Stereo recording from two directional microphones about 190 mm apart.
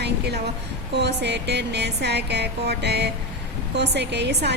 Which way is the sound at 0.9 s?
60° right (ahead or behind).